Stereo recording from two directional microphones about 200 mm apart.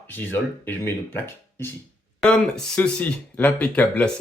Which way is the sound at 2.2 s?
5° left (ahead or behind).